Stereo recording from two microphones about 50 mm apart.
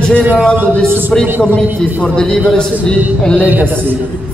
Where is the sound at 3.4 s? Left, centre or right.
Right.